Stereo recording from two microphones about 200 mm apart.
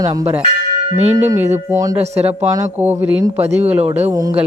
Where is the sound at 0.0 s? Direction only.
20° right (ahead or behind).